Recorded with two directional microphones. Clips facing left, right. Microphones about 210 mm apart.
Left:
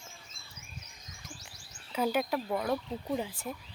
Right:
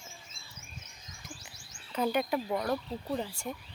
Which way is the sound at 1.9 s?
5° left (ahead or behind).